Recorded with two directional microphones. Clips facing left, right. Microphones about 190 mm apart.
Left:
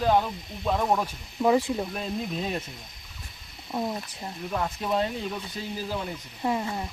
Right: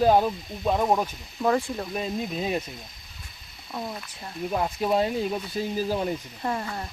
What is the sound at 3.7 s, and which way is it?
Speech, 20° left (ahead or behind).